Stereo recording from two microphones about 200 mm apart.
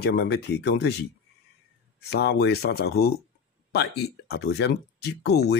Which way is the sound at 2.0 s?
55° left (ahead or behind).